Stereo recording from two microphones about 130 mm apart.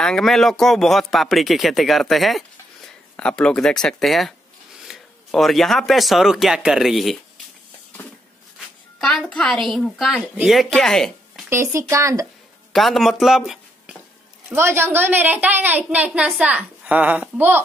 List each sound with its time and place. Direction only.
0.0 s speech: 5° left (ahead or behind)
9.3 s speech: 5° left (ahead or behind)
11.4 s speech: 20° right (ahead or behind)
12.7 s speech: centre (ahead or behind)
14.5 s a woman's voice: 20° right (ahead or behind)